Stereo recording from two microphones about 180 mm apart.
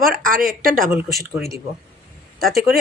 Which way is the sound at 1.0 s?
Centre (ahead or behind).